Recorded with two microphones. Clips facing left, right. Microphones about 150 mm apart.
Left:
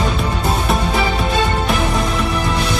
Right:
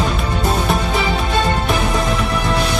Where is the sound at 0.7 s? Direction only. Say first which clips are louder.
Left 2 dB; centre (ahead or behind).